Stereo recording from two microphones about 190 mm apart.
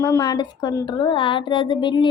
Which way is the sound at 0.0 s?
20° left (ahead or behind).